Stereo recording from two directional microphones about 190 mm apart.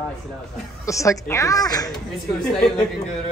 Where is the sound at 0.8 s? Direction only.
15° left (ahead or behind).